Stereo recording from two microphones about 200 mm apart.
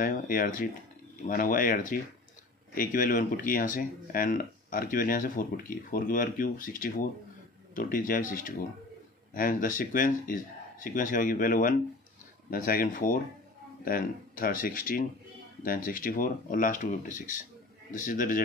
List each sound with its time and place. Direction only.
0.0 s a man's voice: 45° left (ahead or behind)